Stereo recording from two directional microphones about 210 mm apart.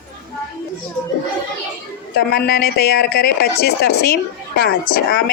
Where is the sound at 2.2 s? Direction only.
50° left (ahead or behind).